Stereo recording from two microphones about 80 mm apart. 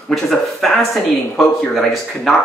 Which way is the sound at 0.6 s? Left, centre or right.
Centre.